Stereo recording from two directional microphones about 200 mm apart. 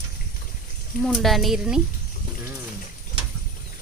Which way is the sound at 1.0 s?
Centre (ahead or behind).